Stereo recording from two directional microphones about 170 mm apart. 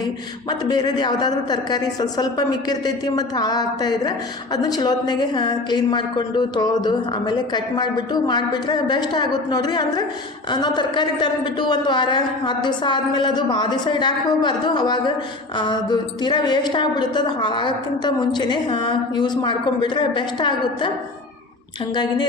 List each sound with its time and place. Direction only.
0.6 s a woman's voice: 25° left (ahead or behind)